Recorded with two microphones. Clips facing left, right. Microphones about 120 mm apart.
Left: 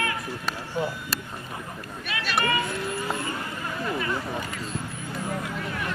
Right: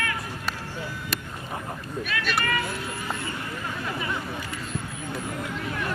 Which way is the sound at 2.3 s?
25° left (ahead or behind).